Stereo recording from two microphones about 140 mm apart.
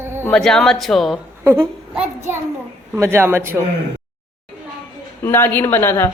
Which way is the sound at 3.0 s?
20° right (ahead or behind).